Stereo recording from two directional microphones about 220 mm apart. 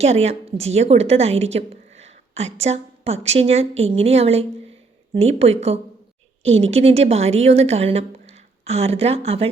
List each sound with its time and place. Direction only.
0.0 s a woman's voice: 30° right (ahead or behind)